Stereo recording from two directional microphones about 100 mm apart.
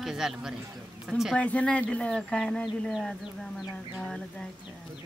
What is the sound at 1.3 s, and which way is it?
Speech, 10° left (ahead or behind).